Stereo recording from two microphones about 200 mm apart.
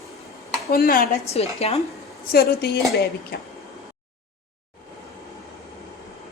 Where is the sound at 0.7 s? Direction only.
45° left (ahead or behind).